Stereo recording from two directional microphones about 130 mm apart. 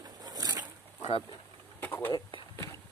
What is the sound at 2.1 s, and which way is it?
Speech, 40° left (ahead or behind).